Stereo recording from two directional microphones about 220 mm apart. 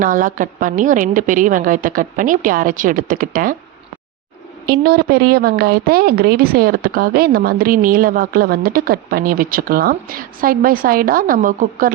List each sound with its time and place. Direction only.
0.0 s a woman's voice: 35° right (ahead or behind)
4.6 s a woman's voice: 45° right (ahead or behind)